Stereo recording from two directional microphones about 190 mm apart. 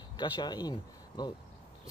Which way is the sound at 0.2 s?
20° left (ahead or behind).